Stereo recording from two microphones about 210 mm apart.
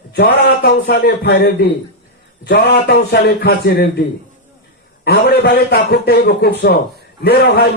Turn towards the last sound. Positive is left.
turn(degrees=50)  # may be behind; listen again after turning